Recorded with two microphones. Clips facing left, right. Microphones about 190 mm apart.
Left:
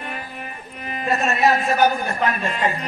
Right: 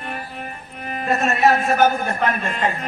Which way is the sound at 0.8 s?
50° right (ahead or behind).